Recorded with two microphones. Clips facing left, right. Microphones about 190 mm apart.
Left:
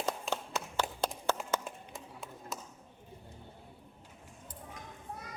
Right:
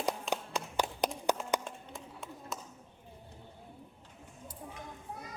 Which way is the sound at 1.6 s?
Centre (ahead or behind).